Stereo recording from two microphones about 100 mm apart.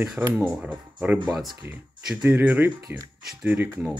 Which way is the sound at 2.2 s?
20° right (ahead or behind).